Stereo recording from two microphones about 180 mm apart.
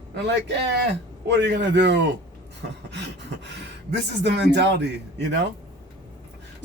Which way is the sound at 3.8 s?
70° right (ahead or behind).